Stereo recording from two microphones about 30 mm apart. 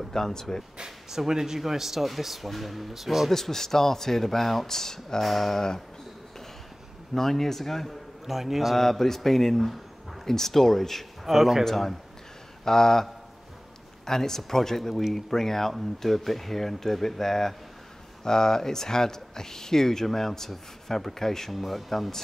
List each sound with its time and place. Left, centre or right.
0.1 s speech: centre
0.7 s speech: centre
3.3 s speech: centre
5.2 s speech: centre
7.2 s speech: centre
8.3 s speech: centre
8.7 s speech: centre
11.2 s speech: centre
11.6 s speech: centre
12.6 s speech: centre
21.5 s speech: centre